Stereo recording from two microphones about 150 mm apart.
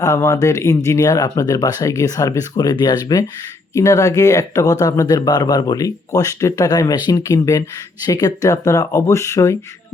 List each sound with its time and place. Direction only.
0.0 s speech: 20° left (ahead or behind)